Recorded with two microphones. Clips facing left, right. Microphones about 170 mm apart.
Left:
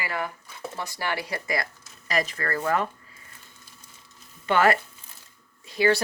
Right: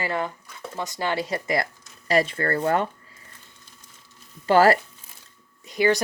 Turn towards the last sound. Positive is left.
turn(degrees=-20)  # may be behind; listen again after turning